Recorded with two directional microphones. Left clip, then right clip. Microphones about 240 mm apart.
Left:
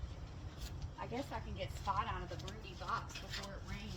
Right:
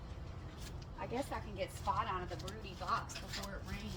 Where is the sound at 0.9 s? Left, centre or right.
Centre.